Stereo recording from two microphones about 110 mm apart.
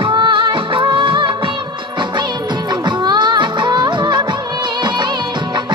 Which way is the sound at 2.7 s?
40° right (ahead or behind).